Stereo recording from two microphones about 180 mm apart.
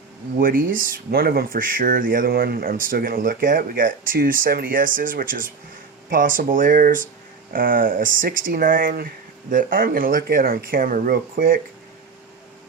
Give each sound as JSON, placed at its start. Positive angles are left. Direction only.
{"t": 0.3, "sound": "speech", "side_deg": -50}